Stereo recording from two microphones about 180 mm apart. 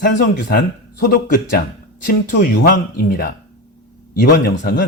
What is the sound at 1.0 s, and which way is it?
Speech, 55° left (ahead or behind).